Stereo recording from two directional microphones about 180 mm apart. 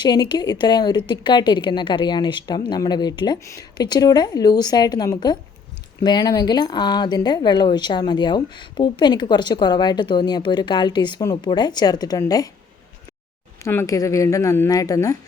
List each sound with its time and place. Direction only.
0.0 s speech: 25° left (ahead or behind)
13.6 s speech: 15° left (ahead or behind)